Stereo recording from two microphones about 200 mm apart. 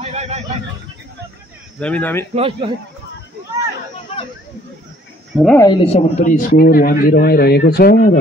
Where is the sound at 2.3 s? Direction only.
30° right (ahead or behind).